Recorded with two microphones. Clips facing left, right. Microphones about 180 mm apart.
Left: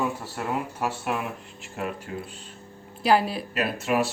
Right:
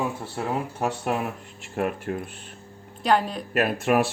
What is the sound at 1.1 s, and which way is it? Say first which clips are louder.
Speech: right 3 dB; 45° right (ahead or behind).